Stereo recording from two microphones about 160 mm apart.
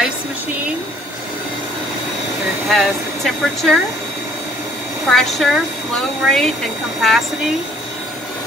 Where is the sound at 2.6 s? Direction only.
Centre (ahead or behind).